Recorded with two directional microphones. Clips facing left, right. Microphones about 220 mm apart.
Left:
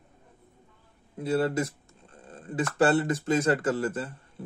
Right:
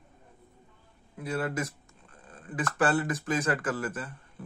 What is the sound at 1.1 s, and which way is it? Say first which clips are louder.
Speech: left 6 dB; 30° left (ahead or behind).